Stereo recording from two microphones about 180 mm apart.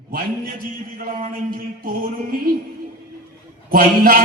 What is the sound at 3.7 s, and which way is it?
Speech, 55° right (ahead or behind).